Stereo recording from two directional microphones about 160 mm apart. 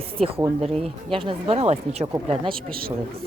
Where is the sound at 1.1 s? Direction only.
35° right (ahead or behind).